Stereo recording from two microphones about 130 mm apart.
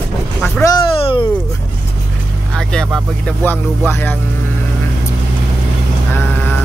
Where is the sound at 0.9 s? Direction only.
45° left (ahead or behind).